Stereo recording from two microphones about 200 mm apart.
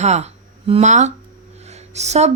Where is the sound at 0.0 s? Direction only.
35° right (ahead or behind).